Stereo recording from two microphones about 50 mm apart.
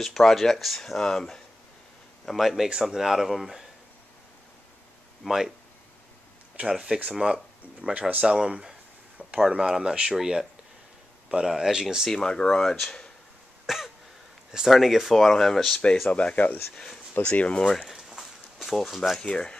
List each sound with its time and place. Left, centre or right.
0.0 s speech: centre
2.2 s speech: centre
5.2 s speech: centre
6.6 s speech: right
7.1 s speech: centre
12.1 s speech: centre
13.7 s cough: centre
14.5 s speech: centre
16.1 s speech: left
16.7 s speech: centre
17.2 s speech: left
17.8 s a sound: centre
19.2 s speech: centre